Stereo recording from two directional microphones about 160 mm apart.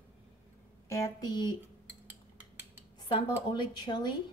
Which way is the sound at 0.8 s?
20° left (ahead or behind).